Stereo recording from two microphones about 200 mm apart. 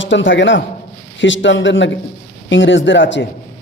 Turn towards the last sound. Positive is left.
turn(degrees=65)  # may be behind; listen again after turning